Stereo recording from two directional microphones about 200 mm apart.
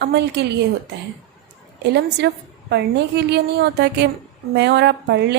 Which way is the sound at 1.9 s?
55° right (ahead or behind).